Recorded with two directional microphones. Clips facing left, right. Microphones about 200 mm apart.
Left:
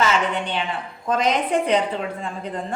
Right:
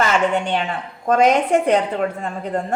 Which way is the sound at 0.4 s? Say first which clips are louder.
Right 4 dB; 45° right (ahead or behind).